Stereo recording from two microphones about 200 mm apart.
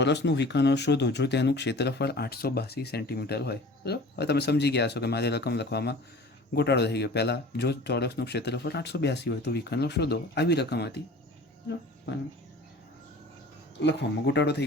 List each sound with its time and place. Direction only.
0.0 s speech: 60° left (ahead or behind)
13.7 s speech: 60° left (ahead or behind)